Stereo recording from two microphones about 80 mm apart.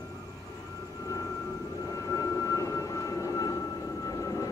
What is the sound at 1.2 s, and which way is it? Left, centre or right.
Vehicle, left.